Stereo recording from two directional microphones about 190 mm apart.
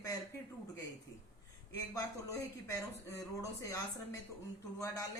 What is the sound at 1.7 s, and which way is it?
Speech, 15° left (ahead or behind).